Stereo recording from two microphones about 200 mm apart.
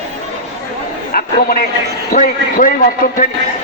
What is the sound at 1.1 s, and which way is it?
A man's voice, 45° left (ahead or behind).